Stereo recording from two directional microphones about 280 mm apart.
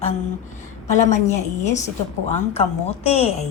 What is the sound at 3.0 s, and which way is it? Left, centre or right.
Speech, left.